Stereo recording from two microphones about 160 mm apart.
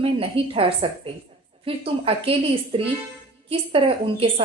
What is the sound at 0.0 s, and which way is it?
A woman's voice, 35° right (ahead or behind).